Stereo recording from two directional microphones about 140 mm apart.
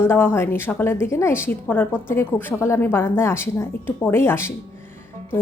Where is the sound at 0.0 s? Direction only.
15° left (ahead or behind).